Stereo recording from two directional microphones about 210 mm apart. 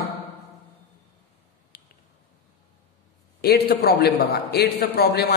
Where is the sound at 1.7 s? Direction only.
45° left (ahead or behind).